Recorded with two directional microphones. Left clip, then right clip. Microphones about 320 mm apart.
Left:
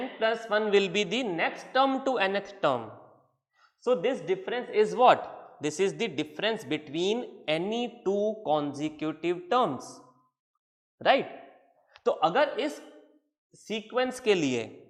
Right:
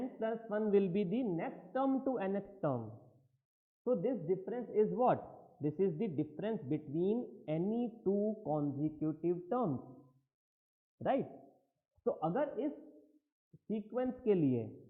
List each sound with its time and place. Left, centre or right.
0.0 s a man's voice: centre
7.9 s a sound: centre
8.8 s a man's voice: centre
11.0 s sigh: centre
12.0 s a man's voice: centre